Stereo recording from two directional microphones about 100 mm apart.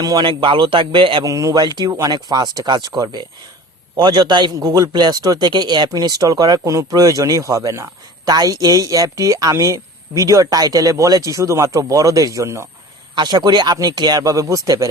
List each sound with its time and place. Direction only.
0.0 s speech: 40° right (ahead or behind)
0.3 s a man's voice: 55° right (ahead or behind)
1.2 s a man's voice: 35° right (ahead or behind)
1.6 s a man's voice: 45° right (ahead or behind)
13.1 s a man's voice: 45° right (ahead or behind)